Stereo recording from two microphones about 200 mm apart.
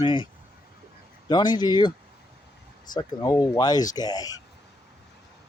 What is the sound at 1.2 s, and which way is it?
Speech, 20° left (ahead or behind).